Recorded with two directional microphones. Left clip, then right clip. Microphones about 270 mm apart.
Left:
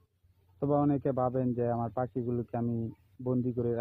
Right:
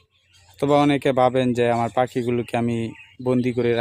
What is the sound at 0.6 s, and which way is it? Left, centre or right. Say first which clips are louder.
Speech: right 11 dB; right.